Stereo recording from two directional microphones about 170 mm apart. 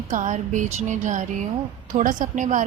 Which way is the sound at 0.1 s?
45° right (ahead or behind).